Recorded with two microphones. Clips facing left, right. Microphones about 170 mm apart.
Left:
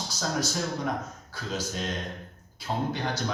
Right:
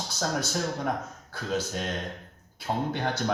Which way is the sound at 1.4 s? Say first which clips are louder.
Right 3 dB; 55° right (ahead or behind).